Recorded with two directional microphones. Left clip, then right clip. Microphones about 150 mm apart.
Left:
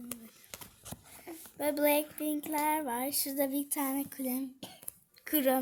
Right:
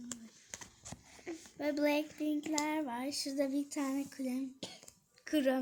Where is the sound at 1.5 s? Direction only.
55° left (ahead or behind).